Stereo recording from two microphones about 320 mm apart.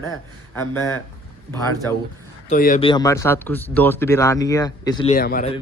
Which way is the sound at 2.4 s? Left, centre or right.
Left.